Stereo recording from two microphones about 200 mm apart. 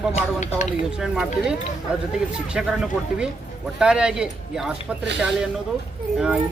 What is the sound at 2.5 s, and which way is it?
Speech, 5° right (ahead or behind).